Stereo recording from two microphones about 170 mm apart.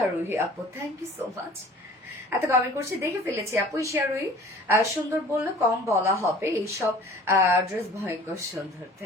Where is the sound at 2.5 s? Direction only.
15° right (ahead or behind).